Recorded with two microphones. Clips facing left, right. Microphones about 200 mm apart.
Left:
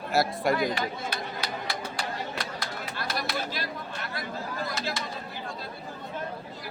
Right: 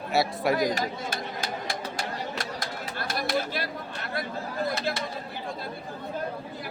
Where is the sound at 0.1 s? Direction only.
Centre (ahead or behind).